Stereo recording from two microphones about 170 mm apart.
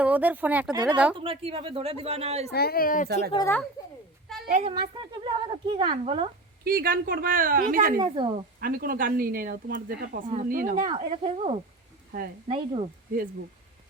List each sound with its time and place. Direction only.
0.0 s speech: 10° right (ahead or behind)
1.1 s a woman's voice: 30° right (ahead or behind)
2.5 s speech: 65° left (ahead or behind)
4.4 s speech: 45° right (ahead or behind)
4.7 s a woman's voice: 30° right (ahead or behind)
6.7 s speech: 60° right (ahead or behind)
7.9 s a woman's voice: 30° right (ahead or behind)
8.6 s a woman's voice: 60° right (ahead or behind)
10.8 s a woman's voice: 30° right (ahead or behind)